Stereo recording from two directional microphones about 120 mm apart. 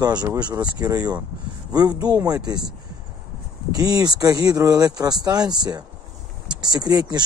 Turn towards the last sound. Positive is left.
turn(degrees=-35)  # may be behind; listen again after turning